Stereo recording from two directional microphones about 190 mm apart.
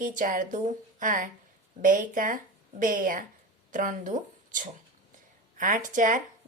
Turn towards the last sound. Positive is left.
turn(degrees=-45)  # may be behind; listen again after turning